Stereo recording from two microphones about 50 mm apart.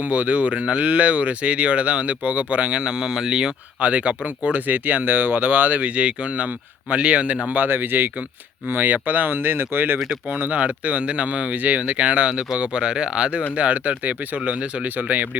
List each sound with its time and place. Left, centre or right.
0.1 s speech: right
3.8 s speech: right
10.5 s speech: right